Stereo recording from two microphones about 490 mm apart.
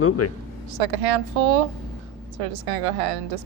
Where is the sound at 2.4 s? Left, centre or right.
Right.